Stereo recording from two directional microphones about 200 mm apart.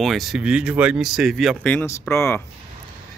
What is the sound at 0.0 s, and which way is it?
Speech, centre (ahead or behind).